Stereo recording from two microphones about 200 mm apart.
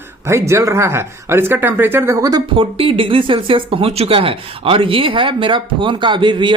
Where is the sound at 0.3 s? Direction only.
15° right (ahead or behind).